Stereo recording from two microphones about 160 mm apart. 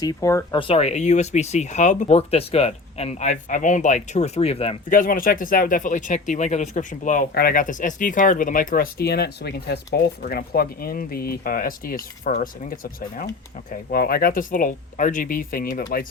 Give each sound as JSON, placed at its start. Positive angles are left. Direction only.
{"t": 0.0, "sound": "speech", "side_deg": 20}
{"t": 0.7, "sound": "speech", "side_deg": 40}
{"t": 4.9, "sound": "speech", "side_deg": 60}
{"t": 7.3, "sound": "speech", "side_deg": 65}